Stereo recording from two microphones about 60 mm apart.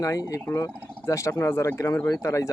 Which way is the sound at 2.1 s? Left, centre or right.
Left.